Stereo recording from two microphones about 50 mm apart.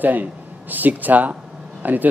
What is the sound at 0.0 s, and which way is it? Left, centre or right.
A man's voice, right.